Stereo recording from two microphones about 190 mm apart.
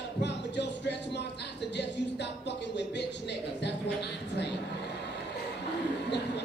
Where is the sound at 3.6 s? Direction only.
65° left (ahead or behind).